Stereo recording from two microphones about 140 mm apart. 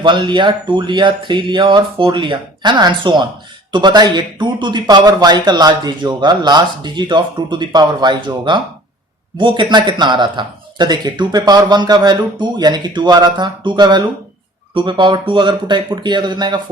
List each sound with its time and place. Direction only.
0.0 s speech: 35° right (ahead or behind)